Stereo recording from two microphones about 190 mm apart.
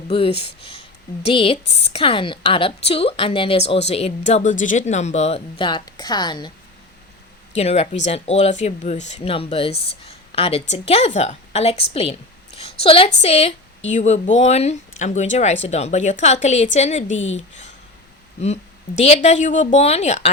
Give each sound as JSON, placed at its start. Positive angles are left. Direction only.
{"t": 0.1, "sound": "a woman's voice", "side_deg": 30}
{"t": 7.5, "sound": "speech", "side_deg": 35}
{"t": 12.5, "sound": "a sound", "side_deg": 30}
{"t": 13.2, "sound": "speech", "side_deg": 35}
{"t": 17.1, "sound": "speech", "side_deg": 85}
{"t": 18.3, "sound": "speech", "side_deg": 35}